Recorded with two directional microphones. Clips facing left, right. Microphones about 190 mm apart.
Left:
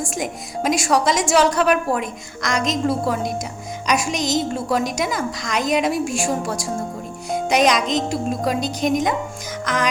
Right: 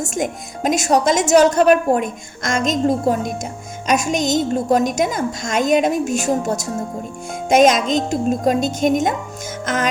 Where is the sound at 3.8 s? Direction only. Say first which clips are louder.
Right 3 dB; 45° right (ahead or behind).